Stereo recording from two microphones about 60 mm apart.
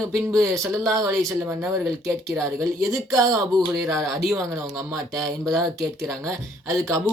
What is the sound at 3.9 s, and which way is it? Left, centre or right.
Speech, centre.